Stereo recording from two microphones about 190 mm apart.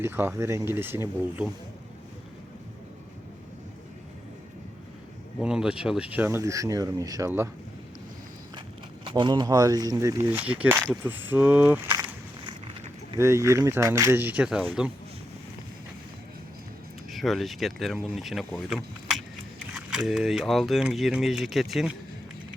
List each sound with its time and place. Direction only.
0.0 s speech: 10° right (ahead or behind)
5.4 s speech: 5° right (ahead or behind)
9.0 s speech: 25° right (ahead or behind)
12.0 s walk: 25° right (ahead or behind)
13.1 s speech: 15° right (ahead or behind)
17.1 s speech: centre (ahead or behind)